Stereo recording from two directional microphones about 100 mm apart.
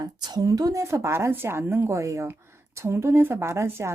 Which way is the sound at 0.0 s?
40° right (ahead or behind).